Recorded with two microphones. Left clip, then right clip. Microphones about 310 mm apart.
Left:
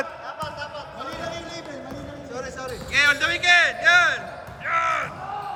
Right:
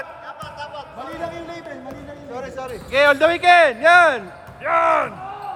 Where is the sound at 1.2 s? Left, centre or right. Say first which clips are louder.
Right 3 dB; right.